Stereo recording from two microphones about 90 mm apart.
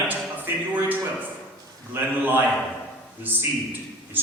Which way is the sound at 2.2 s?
20° right (ahead or behind).